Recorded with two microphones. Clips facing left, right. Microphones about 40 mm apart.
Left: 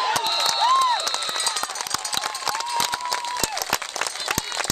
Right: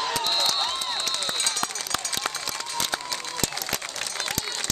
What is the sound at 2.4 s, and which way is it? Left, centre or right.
Applause, left.